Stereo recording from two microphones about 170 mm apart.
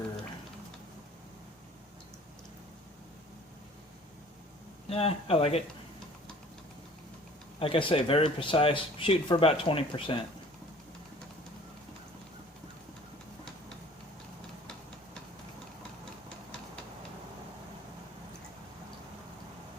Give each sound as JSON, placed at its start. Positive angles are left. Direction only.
{"t": 4.9, "sound": "speech", "side_deg": 35}
{"t": 7.6, "sound": "speech", "side_deg": 30}